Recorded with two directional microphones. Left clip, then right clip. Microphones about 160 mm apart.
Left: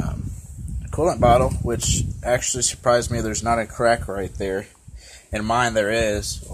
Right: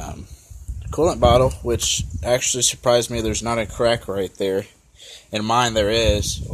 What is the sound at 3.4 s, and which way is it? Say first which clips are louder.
Speech: left 2 dB; 55° right (ahead or behind).